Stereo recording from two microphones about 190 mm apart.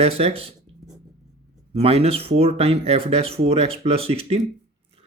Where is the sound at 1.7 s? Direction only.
30° right (ahead or behind).